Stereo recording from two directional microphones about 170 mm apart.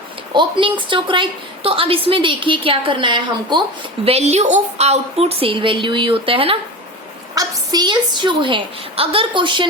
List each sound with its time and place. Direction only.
0.3 s a woman's voice: 30° right (ahead or behind)
4.0 s a woman's voice: 40° right (ahead or behind)